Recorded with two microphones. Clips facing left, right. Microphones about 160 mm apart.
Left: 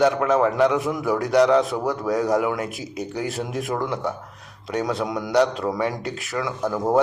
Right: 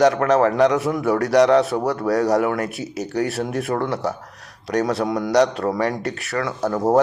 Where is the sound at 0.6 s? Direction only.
75° right (ahead or behind).